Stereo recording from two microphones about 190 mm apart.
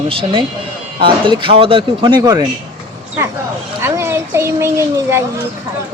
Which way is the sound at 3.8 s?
15° right (ahead or behind).